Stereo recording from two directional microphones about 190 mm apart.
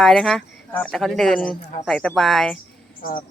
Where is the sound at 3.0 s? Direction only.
50° left (ahead or behind).